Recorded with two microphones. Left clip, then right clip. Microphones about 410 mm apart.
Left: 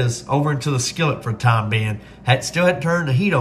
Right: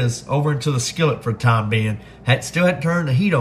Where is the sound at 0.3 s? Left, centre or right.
Centre.